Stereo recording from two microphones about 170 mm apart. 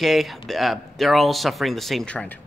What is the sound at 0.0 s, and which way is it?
Speech, centre (ahead or behind).